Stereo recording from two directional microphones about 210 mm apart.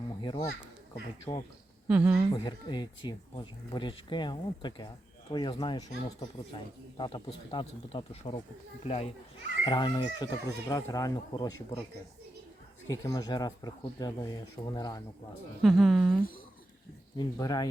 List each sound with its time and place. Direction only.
0.2 s children playing: 20° left (ahead or behind)
1.3 s speech: 15° left (ahead or behind)
1.9 s speech: 10° right (ahead or behind)
2.3 s a child's voice: 20° left (ahead or behind)
12.9 s speech: 15° left (ahead or behind)
15.6 s a sound: centre (ahead or behind)
17.2 s speech: 20° left (ahead or behind)